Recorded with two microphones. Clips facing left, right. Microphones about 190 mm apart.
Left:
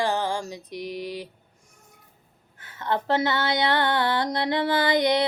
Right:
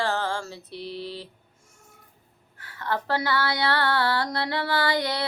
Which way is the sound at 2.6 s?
20° left (ahead or behind).